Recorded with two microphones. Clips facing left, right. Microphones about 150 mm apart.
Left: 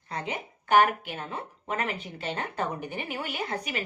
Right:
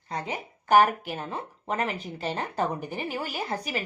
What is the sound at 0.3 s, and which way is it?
A woman's voice, 40° right (ahead or behind).